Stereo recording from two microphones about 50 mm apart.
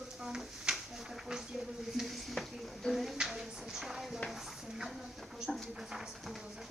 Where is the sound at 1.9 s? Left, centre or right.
Centre.